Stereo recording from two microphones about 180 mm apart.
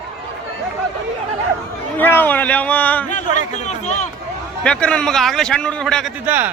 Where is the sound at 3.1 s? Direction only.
45° left (ahead or behind).